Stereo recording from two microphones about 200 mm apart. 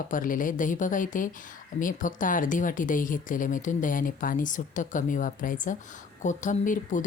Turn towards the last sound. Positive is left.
turn(degrees=40)  # may be behind; listen again after turning